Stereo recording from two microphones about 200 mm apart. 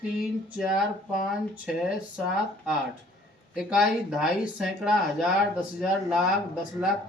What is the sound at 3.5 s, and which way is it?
Speech, centre (ahead or behind).